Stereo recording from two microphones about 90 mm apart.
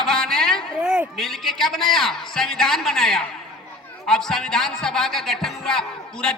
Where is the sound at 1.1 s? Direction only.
Centre (ahead or behind).